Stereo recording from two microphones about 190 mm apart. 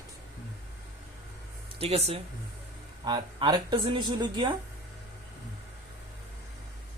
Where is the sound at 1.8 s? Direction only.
30° right (ahead or behind).